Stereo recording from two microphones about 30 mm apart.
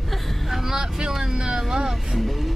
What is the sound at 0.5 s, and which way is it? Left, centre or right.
Vehicle, centre.